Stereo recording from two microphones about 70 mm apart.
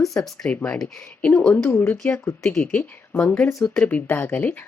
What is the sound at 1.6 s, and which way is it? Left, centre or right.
Speech, left.